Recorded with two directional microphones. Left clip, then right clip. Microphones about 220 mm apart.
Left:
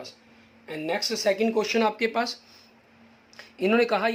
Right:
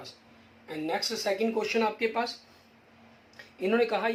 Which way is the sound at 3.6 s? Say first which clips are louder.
Left 4 dB; 45° left (ahead or behind).